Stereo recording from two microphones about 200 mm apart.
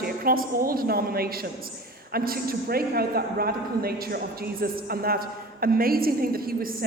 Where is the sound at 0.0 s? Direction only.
45° right (ahead or behind).